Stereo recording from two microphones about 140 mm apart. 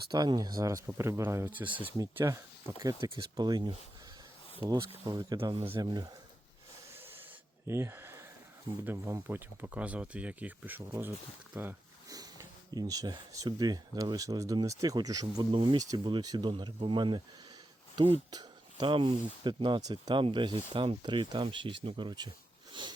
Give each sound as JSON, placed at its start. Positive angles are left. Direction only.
{"t": 0.1, "sound": "speech", "side_deg": -30}
{"t": 2.0, "sound": "speech", "side_deg": -20}
{"t": 7.7, "sound": "speech", "side_deg": -20}
{"t": 12.0, "sound": "speech", "side_deg": -25}
{"t": 18.3, "sound": "speech", "side_deg": -30}